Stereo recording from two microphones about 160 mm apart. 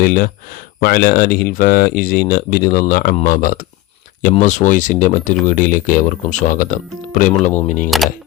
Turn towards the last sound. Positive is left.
turn(degrees=55)  # may be behind; listen again after turning